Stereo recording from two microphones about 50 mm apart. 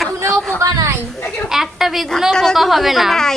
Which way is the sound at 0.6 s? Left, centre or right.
Right.